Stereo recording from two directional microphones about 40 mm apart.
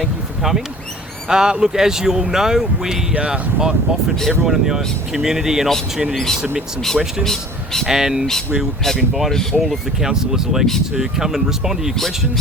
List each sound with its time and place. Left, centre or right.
1.3 s speech: centre
3.2 s speech: right
4.3 s speech: centre
7.3 s speech: centre
7.9 s speech: centre
9.3 s speech: centre
9.6 s speech: centre